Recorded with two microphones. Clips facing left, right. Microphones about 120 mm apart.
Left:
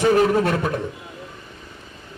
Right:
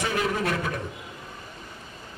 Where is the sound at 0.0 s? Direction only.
35° left (ahead or behind).